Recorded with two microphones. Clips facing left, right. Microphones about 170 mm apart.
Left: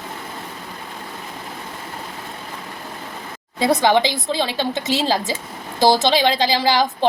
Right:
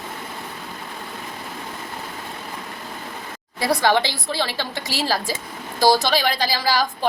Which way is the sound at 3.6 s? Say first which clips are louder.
Left 3 dB; 20° left (ahead or behind).